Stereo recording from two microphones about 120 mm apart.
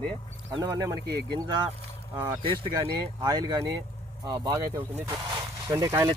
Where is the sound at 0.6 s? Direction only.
30° right (ahead or behind).